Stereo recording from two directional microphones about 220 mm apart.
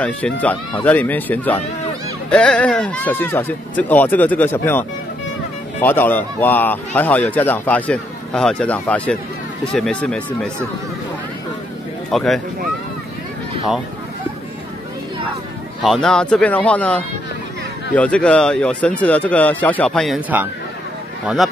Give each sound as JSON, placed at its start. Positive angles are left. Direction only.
{"t": 0.0, "sound": "speech", "side_deg": 5}
{"t": 12.1, "sound": "speech", "side_deg": 0}
{"t": 15.8, "sound": "speech", "side_deg": 0}